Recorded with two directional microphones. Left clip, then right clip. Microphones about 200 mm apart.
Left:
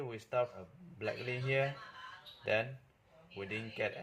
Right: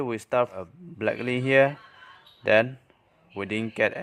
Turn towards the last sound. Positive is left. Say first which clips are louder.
# right 13 dB
turn(degrees=-50)  # may be behind; listen again after turning